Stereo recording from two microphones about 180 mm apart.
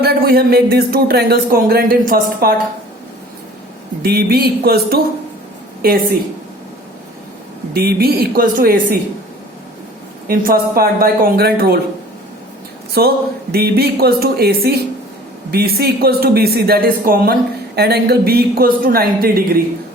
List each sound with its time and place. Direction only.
0.0 s speech: 55° right (ahead or behind)
4.0 s speech: 60° right (ahead or behind)
7.7 s speech: 60° right (ahead or behind)
10.2 s speech: 55° right (ahead or behind)
12.9 s speech: 60° right (ahead or behind)